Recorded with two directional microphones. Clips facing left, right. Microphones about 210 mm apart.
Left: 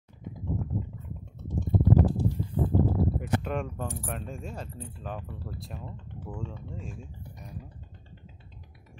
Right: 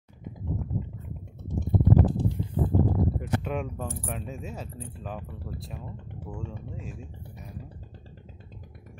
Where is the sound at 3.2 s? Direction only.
Centre (ahead or behind).